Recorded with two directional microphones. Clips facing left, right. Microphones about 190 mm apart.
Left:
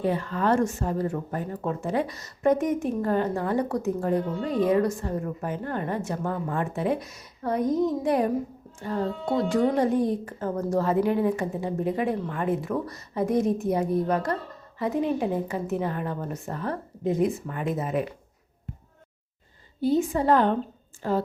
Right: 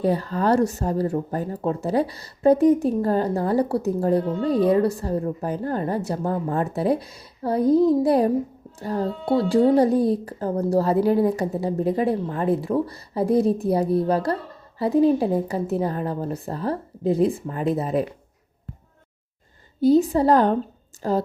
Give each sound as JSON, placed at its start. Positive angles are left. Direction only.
{"t": 0.0, "sound": "speech", "side_deg": -35}
{"t": 19.8, "sound": "speech", "side_deg": -35}